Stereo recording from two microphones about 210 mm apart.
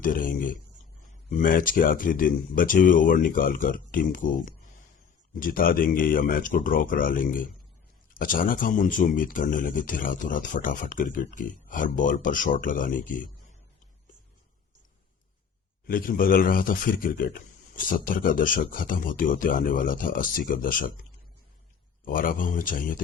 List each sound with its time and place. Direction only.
0.0 s a man's voice: 40° left (ahead or behind)
15.9 s a man's voice: 45° left (ahead or behind)
22.0 s a man's voice: 40° left (ahead or behind)